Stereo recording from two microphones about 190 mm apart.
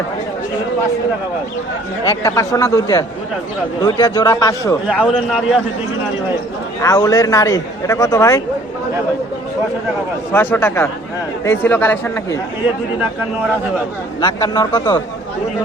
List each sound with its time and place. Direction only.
2.0 s a man's voice: 15° left (ahead or behind)
4.9 s a man's voice: 5° right (ahead or behind)
6.8 s a man's voice: 20° left (ahead or behind)
10.3 s speech: 10° left (ahead or behind)
14.2 s a man's voice: 20° left (ahead or behind)